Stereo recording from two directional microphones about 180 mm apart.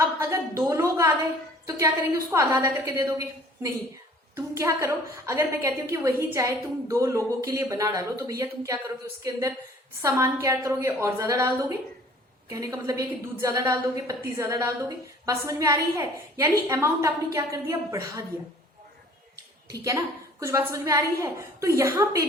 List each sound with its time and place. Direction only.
0.2 s a woman's voice: 15° right (ahead or behind)
2.3 s a woman's voice: 15° right (ahead or behind)
10.0 s a woman's voice: 15° right (ahead or behind)
19.7 s a woman's voice: 20° right (ahead or behind)